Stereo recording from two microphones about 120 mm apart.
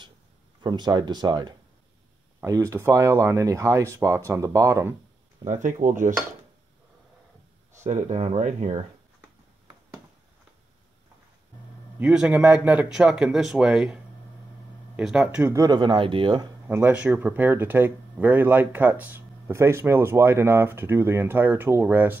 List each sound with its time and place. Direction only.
0.6 s speech: 40° right (ahead or behind)
5.5 s speech: 90° right
7.8 s speech: 90° right
12.0 s speech: 10° right (ahead or behind)
15.0 s speech: 5° right (ahead or behind)
15.4 s speech: 25° right (ahead or behind)
15.7 s speech: 40° right (ahead or behind)
16.6 s speech: 15° right (ahead or behind)